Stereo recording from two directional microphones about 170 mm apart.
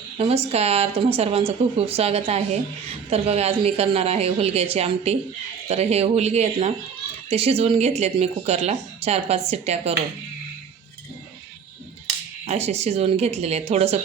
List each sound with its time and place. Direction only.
0.2 s speech: 35° right (ahead or behind)
12.5 s speech: 40° right (ahead or behind)